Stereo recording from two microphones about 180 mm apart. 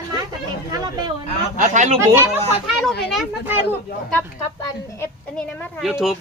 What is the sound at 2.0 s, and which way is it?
Speech, 15° right (ahead or behind).